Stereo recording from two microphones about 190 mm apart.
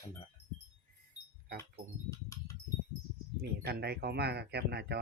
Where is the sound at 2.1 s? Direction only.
15° left (ahead or behind).